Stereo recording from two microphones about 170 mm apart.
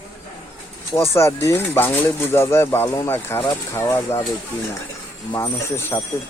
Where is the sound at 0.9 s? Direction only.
15° left (ahead or behind).